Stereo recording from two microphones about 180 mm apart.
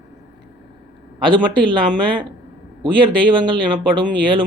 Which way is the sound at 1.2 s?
25° right (ahead or behind).